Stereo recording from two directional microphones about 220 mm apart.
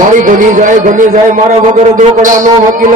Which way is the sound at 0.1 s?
35° right (ahead or behind).